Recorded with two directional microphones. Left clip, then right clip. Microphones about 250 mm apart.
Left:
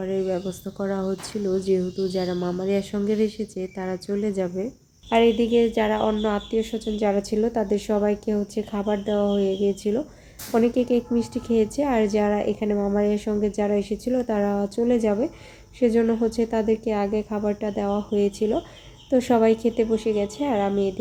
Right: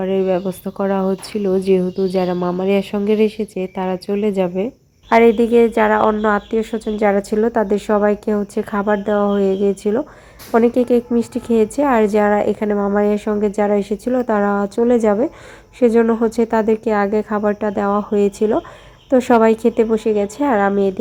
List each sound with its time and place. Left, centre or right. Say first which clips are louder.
0.0 s speech: right 8 dB; centre